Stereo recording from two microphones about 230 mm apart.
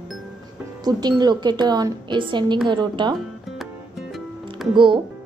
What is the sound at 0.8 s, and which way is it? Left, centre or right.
A woman's voice, centre.